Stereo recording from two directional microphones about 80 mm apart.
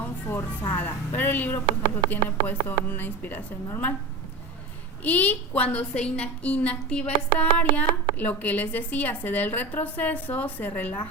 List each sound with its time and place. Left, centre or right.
0.0 s music: left
0.8 s a woman's voice: left
5.0 s a woman's voice: centre